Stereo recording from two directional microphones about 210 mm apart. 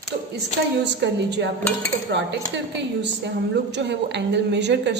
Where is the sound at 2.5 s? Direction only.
55° right (ahead or behind).